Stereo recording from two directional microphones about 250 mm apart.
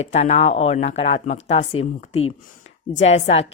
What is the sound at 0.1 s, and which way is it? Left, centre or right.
A woman's voice, left.